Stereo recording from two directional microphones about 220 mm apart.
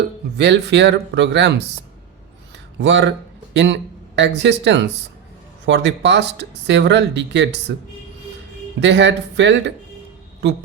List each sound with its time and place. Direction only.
0.3 s speech: 50° right (ahead or behind)
2.7 s speech: 55° right (ahead or behind)
8.8 s speech: 50° right (ahead or behind)